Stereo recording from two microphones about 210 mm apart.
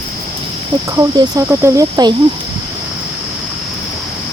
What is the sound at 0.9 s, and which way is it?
Speech, 15° right (ahead or behind).